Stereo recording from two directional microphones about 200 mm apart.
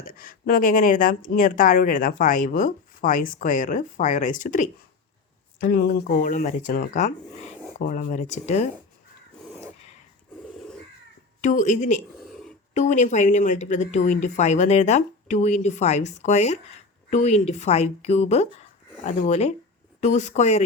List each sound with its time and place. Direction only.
0.0 s speech: 45° left (ahead or behind)
11.3 s speech: 40° left (ahead or behind)
12.2 s a sound: centre (ahead or behind)
12.7 s speech: 35° left (ahead or behind)